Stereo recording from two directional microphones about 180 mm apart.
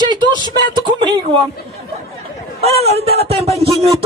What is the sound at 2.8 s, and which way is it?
Speech, 35° right (ahead or behind).